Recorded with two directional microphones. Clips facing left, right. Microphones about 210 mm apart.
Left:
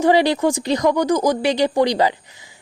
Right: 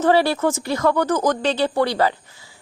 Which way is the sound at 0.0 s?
15° left (ahead or behind).